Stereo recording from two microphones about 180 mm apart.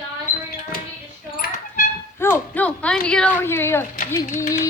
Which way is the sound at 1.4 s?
50° left (ahead or behind).